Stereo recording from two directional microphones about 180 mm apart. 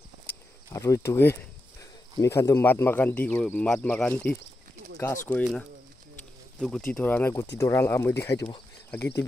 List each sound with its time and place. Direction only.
0.7 s speech: 15° left (ahead or behind)
5.4 s speech: centre (ahead or behind)